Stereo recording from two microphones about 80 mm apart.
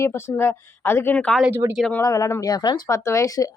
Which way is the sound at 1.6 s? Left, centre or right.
Right.